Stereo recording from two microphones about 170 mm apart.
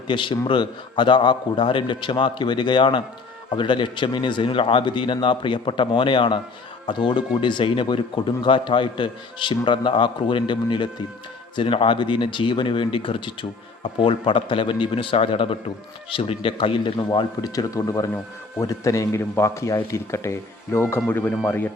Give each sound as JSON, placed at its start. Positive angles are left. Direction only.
{"t": 0.1, "sound": "a man's voice", "side_deg": 30}